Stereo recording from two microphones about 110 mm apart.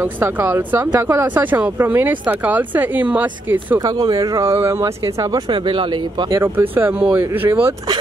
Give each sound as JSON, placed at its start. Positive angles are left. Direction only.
{"t": 0.0, "sound": "speech", "side_deg": -20}
{"t": 4.1, "sound": "speech", "side_deg": -30}
{"t": 5.5, "sound": "speech", "side_deg": -50}
{"t": 6.3, "sound": "speech", "side_deg": -20}